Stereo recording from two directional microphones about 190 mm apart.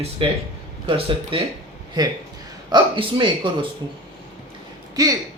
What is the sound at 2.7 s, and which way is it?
Speech, 25° right (ahead or behind).